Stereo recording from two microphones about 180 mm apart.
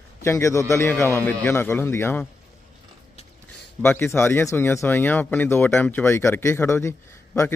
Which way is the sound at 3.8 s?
15° left (ahead or behind).